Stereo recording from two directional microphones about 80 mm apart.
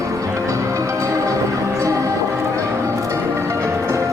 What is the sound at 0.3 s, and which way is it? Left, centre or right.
Music, right.